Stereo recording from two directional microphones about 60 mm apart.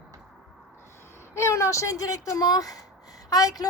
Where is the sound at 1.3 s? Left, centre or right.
Left.